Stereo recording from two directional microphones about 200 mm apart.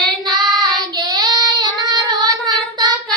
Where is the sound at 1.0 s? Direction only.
20° right (ahead or behind).